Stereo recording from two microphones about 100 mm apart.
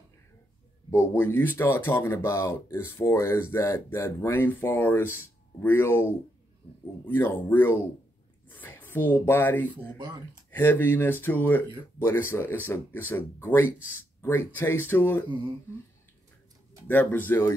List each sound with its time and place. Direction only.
0.8 s speech: 25° left (ahead or behind)
8.5 s a sound: 20° left (ahead or behind)
9.2 s speech: 20° left (ahead or behind)
10.0 s speech: 45° right (ahead or behind)
10.5 s speech: 20° left (ahead or behind)
16.8 s speech: 20° left (ahead or behind)